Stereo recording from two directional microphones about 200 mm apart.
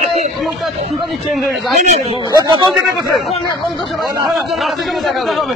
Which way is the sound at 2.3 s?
20° right (ahead or behind).